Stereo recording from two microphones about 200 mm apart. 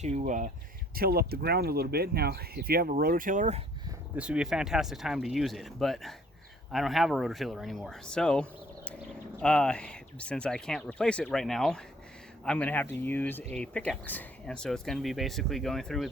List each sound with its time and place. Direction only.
0.0 s speech: 35° right (ahead or behind)
0.9 s speech: 50° right (ahead or behind)
4.1 s speech: 5° right (ahead or behind)